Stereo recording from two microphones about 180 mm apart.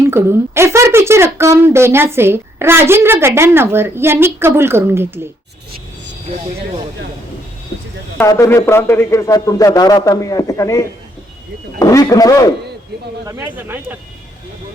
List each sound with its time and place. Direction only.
0.1 s a woman's voice: 15° right (ahead or behind)
8.2 s a man's voice: 15° left (ahead or behind)
13.2 s a woman's voice: 15° right (ahead or behind)